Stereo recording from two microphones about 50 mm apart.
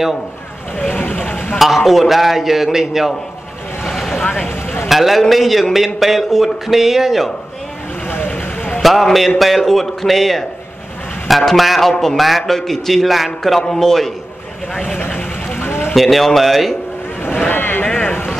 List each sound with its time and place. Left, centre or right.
0.9 s speech: left
1.6 s speech: centre
3.8 s vehicle: centre
4.5 s vehicle: left
4.8 s speech: centre
8.8 s speech: centre
11.9 s speech: centre
12.2 s speech: centre
15.0 s vehicle: left
15.9 s speech: centre
17.5 s a sound: left